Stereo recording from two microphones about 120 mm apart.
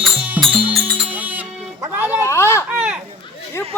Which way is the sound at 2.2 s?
20° left (ahead or behind).